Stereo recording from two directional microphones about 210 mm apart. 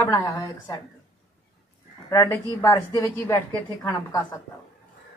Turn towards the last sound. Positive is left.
turn(degrees=10)  # may be behind; listen again after turning